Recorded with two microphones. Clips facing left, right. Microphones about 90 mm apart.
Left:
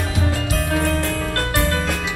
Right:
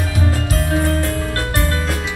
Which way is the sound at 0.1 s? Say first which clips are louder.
Right 2 dB; 40° right (ahead or behind).